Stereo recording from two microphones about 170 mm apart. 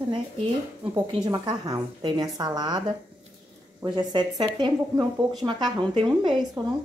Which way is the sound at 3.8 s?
25° right (ahead or behind).